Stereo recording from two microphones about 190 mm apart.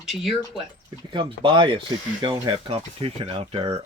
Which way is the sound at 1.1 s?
25° right (ahead or behind).